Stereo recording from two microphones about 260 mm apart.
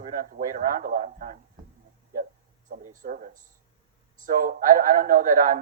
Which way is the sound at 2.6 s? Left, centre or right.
Right.